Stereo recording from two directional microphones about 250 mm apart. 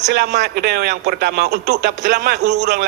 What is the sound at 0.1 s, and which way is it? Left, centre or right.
A man's voice, right.